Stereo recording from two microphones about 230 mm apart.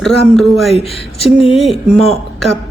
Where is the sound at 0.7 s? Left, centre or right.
Left.